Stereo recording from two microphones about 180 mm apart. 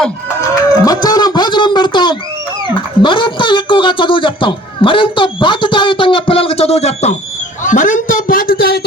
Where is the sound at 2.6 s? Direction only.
25° left (ahead or behind).